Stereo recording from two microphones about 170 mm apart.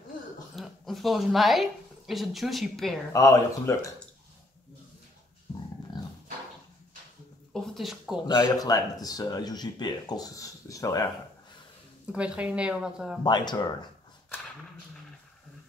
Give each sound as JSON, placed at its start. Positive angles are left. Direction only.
{"t": 0.6, "sound": "speech", "side_deg": 0}
{"t": 3.1, "sound": "speech", "side_deg": 20}
{"t": 5.5, "sound": "dog", "side_deg": 35}
{"t": 7.5, "sound": "a sound", "side_deg": 0}
{"t": 8.4, "sound": "speech", "side_deg": 20}
{"t": 12.1, "sound": "a woman's voice", "side_deg": -5}
{"t": 13.2, "sound": "speech", "side_deg": 25}